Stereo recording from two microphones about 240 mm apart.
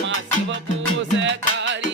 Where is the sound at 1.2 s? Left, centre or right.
Right.